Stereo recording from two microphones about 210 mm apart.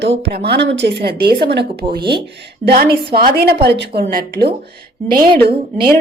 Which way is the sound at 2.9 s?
25° right (ahead or behind).